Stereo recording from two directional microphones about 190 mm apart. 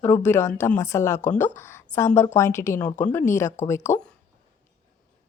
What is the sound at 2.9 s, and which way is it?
Speech, 40° left (ahead or behind).